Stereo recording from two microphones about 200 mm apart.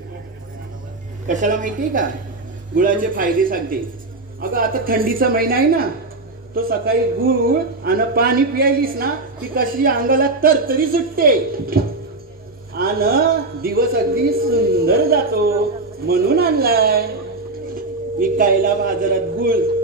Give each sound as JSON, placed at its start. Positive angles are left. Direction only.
{"t": 1.2, "sound": "a woman's voice", "side_deg": -40}